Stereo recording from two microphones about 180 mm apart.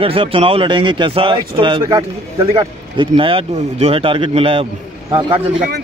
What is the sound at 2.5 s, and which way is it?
A man's voice, 25° right (ahead or behind).